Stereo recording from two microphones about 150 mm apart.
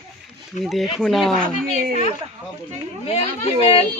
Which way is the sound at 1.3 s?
70° right (ahead or behind).